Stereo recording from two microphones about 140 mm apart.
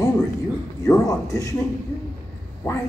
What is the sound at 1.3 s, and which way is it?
Speech, 25° left (ahead or behind).